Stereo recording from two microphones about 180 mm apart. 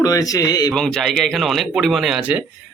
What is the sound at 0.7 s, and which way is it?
Speech, 5° left (ahead or behind).